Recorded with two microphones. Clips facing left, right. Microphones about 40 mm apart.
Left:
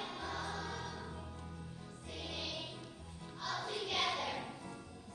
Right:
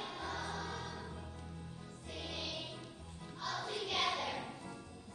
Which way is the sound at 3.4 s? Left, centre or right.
Centre.